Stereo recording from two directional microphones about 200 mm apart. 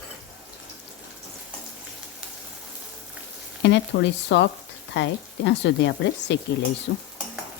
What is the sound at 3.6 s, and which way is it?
Speech, 60° left (ahead or behind).